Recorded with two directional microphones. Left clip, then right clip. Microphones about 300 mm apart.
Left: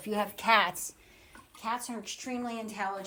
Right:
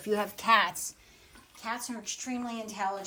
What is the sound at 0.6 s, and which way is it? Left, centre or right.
A woman's voice, centre.